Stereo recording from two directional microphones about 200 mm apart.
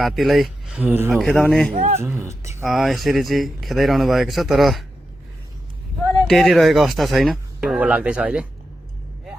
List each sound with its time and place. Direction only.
0.0 s speech: centre (ahead or behind)
1.7 s a man's voice: 35° right (ahead or behind)
2.0 s speech: 10° right (ahead or behind)
2.6 s speech: centre (ahead or behind)
6.2 s speech: centre (ahead or behind)